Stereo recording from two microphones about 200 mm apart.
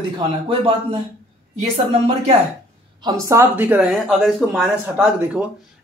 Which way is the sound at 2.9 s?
20° right (ahead or behind).